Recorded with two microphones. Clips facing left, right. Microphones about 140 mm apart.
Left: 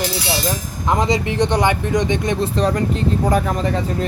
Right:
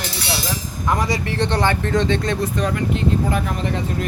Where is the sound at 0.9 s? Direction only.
20° left (ahead or behind).